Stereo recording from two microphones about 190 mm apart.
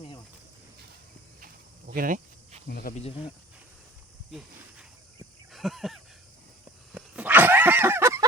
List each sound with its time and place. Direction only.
1.9 s cricket: 45° right (ahead or behind)
2.6 s speech: 55° left (ahead or behind)
2.9 s speech: 30° left (ahead or behind)
4.3 s a sound: centre (ahead or behind)